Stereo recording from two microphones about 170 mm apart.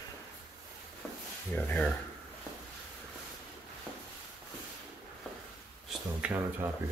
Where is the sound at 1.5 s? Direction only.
10° left (ahead or behind).